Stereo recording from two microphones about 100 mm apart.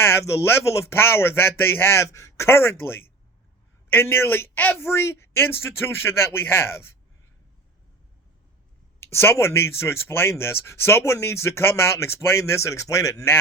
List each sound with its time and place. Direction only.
0.0 s speech: 25° left (ahead or behind)
9.0 s speech: 25° left (ahead or behind)